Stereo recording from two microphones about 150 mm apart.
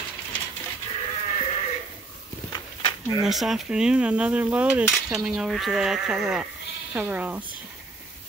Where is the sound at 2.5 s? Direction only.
25° left (ahead or behind).